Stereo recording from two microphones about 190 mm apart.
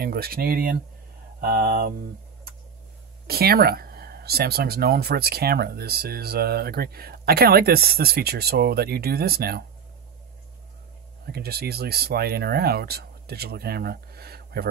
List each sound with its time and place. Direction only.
0.0 s speech: 55° right (ahead or behind)
3.3 s speech: 55° right (ahead or behind)
11.3 s speech: 55° right (ahead or behind)